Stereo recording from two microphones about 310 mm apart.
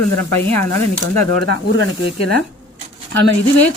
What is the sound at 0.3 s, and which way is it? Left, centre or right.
Speech, left.